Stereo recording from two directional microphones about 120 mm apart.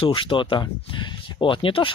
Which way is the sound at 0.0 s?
45° left (ahead or behind).